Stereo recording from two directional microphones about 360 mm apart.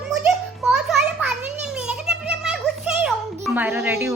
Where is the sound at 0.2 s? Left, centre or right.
Centre.